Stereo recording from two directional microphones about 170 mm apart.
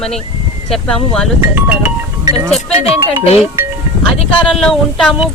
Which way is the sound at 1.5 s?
10° right (ahead or behind).